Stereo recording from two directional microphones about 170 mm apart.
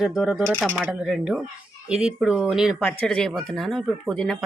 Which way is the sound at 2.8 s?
10° left (ahead or behind).